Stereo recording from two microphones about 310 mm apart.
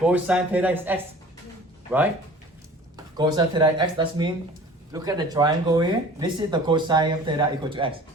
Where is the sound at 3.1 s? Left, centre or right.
Centre.